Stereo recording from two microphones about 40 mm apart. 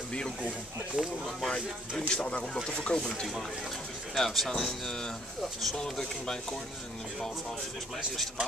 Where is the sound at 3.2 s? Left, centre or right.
Centre.